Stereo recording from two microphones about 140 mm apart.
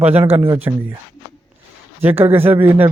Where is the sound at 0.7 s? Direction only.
25° right (ahead or behind).